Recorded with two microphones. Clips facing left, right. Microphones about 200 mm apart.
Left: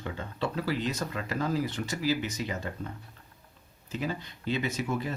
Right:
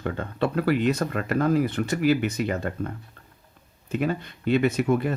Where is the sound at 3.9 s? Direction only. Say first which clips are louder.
Right 8 dB; 60° right (ahead or behind).